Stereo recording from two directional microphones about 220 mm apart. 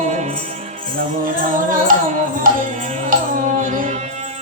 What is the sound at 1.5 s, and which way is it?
Music, 40° right (ahead or behind).